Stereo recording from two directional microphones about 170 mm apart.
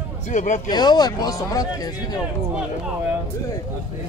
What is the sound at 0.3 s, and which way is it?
Speech, 45° left (ahead or behind).